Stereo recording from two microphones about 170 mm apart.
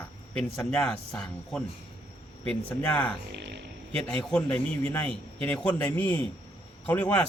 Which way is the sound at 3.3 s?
90° right.